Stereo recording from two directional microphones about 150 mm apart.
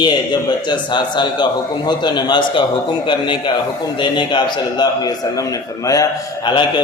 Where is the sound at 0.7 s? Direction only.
30° left (ahead or behind).